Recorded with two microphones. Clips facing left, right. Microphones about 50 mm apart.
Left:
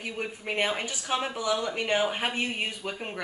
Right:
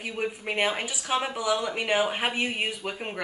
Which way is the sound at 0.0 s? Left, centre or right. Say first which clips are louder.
Right 3 dB; centre.